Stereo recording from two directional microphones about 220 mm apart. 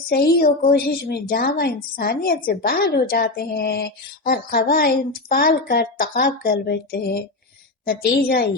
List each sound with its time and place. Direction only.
0.1 s a woman's voice: 45° left (ahead or behind)